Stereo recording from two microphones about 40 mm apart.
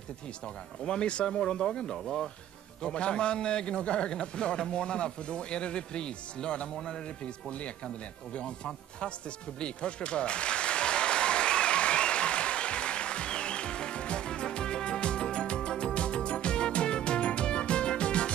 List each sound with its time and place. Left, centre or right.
0.8 s a man's voice: left
9.6 s applause: left